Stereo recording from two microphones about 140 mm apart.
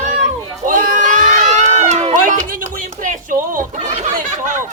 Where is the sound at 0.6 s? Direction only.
70° right (ahead or behind).